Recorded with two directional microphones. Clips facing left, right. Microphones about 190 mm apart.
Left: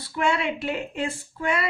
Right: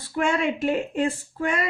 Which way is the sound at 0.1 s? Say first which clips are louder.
Right 2 dB; 45° right (ahead or behind).